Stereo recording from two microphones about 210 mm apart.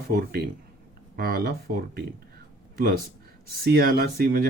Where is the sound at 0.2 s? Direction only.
45° right (ahead or behind).